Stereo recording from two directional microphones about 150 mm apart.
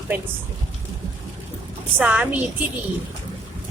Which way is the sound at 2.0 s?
10° right (ahead or behind).